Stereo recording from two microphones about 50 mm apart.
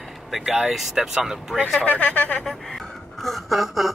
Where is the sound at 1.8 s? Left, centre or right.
Left.